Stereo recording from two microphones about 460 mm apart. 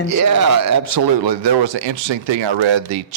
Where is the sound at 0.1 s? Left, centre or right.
Right.